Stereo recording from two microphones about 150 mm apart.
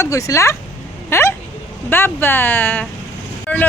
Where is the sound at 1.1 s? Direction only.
15° left (ahead or behind).